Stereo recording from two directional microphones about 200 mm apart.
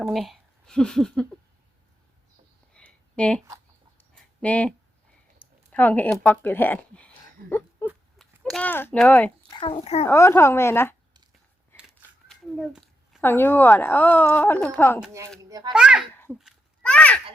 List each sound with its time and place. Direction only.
0.0 s speech: centre (ahead or behind)
2.7 s a sound: 5° left (ahead or behind)
5.4 s speech: 10° left (ahead or behind)
7.8 s a sound: 10° left (ahead or behind)
8.2 s a child's voice: 5° left (ahead or behind)
9.5 s a child's voice: 25° left (ahead or behind)
10.1 s speech: 10° left (ahead or behind)
11.8 s a sound: centre (ahead or behind)
13.2 s speech: 10° left (ahead or behind)
15.4 s children playing: 20° right (ahead or behind)
15.7 s a child's voice: 5° right (ahead or behind)
16.1 s a sound: 10° left (ahead or behind)
16.4 s babbling: centre (ahead or behind)